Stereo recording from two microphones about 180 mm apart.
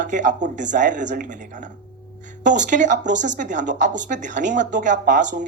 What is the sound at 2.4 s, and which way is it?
Speech, 45° right (ahead or behind).